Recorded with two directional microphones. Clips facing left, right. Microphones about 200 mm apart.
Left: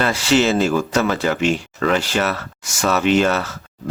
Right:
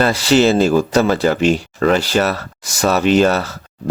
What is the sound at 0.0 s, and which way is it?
Speech, 35° right (ahead or behind).